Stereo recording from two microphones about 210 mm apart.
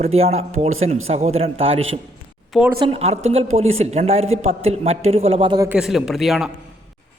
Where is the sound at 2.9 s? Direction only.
30° right (ahead or behind).